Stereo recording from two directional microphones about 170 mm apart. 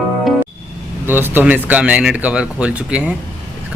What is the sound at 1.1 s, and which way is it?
Speech, 10° right (ahead or behind).